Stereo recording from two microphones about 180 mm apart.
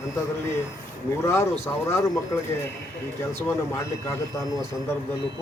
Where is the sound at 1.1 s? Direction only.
15° left (ahead or behind).